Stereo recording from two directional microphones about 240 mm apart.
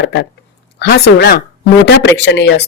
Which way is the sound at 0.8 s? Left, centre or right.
Left.